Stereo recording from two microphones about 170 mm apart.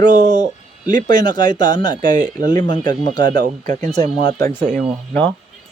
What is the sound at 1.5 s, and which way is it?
Speech, 50° right (ahead or behind).